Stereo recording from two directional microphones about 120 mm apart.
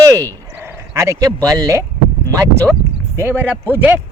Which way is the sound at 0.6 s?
25° right (ahead or behind).